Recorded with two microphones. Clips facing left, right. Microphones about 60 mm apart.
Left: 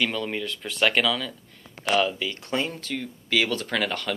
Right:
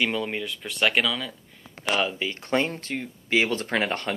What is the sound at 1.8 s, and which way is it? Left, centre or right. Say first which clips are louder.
Speech: left 2 dB; centre.